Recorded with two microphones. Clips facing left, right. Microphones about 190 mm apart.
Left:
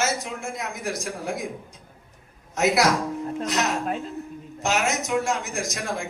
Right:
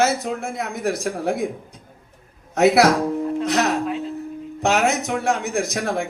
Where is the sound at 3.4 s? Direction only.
60° right (ahead or behind).